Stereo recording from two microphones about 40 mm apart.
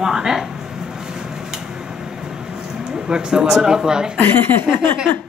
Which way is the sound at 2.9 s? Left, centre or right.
Centre.